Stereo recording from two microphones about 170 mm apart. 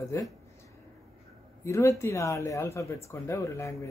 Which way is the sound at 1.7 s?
15° left (ahead or behind).